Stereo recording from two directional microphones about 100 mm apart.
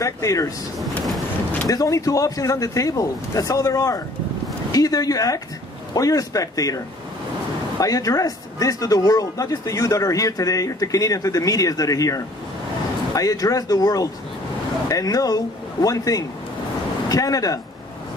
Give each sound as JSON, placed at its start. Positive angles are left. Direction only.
{"t": 0.0, "sound": "speech", "side_deg": 35}
{"t": 0.7, "sound": "speech", "side_deg": 0}
{"t": 1.7, "sound": "speech", "side_deg": 35}
{"t": 7.8, "sound": "speech", "side_deg": 35}